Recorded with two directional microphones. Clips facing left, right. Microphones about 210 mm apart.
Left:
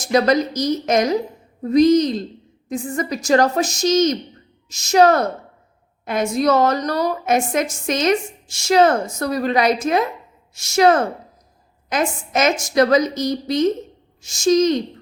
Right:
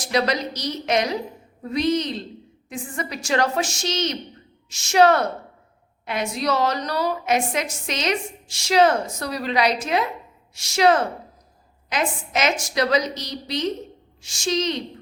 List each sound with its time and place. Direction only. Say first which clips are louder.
0.0 s a woman's voice: left 6 dB; 45° left (ahead or behind)